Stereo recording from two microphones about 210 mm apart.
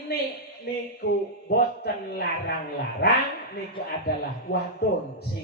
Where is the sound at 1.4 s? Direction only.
50° left (ahead or behind).